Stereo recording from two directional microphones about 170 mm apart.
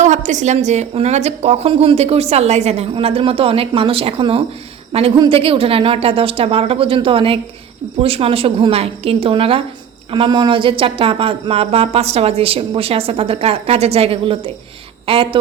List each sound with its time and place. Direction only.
0.0 s a woman's voice: 45° right (ahead or behind)